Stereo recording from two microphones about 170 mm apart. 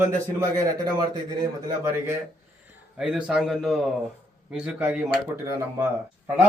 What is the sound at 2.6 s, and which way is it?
A man's voice, 5° right (ahead or behind).